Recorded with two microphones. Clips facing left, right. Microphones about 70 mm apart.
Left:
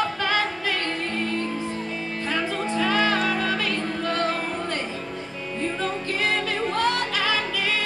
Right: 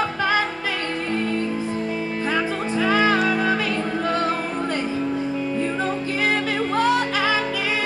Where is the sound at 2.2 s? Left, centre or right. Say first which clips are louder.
Right 2 dB; centre.